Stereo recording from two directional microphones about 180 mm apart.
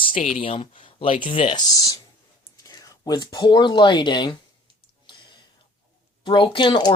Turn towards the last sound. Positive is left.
turn(degrees=25)  # may be behind; listen again after turning